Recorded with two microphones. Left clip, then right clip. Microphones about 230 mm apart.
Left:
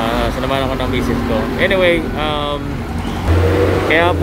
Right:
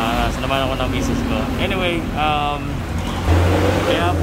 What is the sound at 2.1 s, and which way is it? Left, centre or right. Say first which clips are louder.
Speech: even; centre.